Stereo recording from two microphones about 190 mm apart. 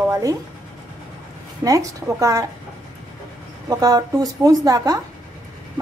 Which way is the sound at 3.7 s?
20° right (ahead or behind).